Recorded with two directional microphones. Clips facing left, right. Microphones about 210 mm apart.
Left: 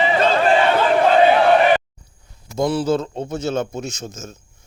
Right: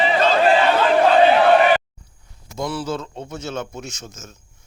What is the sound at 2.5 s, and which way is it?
A man's voice, 35° left (ahead or behind).